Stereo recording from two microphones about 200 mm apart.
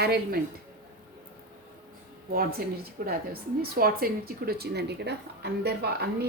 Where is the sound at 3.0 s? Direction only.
50° right (ahead or behind).